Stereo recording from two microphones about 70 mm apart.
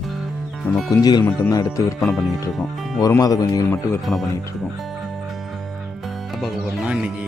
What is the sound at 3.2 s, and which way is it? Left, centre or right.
Speech, left.